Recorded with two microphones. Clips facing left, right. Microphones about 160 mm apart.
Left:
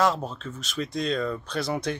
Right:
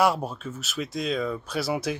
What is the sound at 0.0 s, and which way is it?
Speech, 10° right (ahead or behind).